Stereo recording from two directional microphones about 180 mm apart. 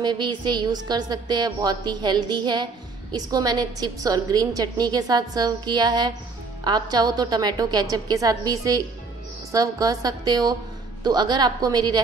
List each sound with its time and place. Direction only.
0.0 s a woman's voice: 25° right (ahead or behind)